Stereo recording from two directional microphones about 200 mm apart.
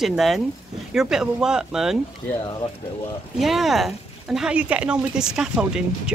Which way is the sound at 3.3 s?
Centre (ahead or behind).